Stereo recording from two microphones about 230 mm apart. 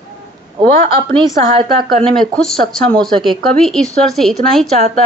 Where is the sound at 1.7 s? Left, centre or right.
Right.